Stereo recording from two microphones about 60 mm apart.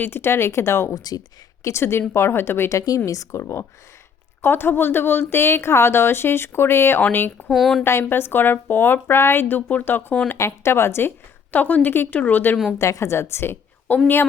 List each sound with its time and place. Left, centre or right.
0.0 s a woman's voice: left
0.9 s speech: left
1.6 s a woman's voice: left
2.6 s a woman's voice: left
4.4 s a woman's voice: left
7.5 s a woman's voice: centre
7.9 s a woman's voice: left
10.3 s a woman's voice: left
11.5 s a woman's voice: left
12.8 s a woman's voice: left